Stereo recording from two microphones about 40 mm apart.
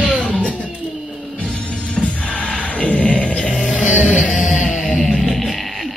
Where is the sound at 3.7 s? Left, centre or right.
Left.